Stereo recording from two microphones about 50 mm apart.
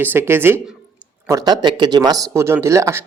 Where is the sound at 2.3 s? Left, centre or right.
Right.